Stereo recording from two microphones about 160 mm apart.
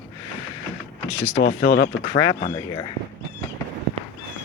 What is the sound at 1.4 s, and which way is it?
Speech, 70° left (ahead or behind).